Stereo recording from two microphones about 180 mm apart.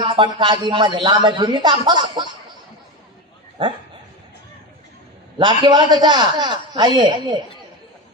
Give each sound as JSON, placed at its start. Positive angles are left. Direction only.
{"t": 0.0, "sound": "speech", "side_deg": -25}
{"t": 5.4, "sound": "speech", "side_deg": -25}